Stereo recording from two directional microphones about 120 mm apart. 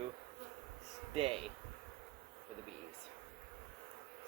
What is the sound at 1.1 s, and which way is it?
Speech, 55° right (ahead or behind).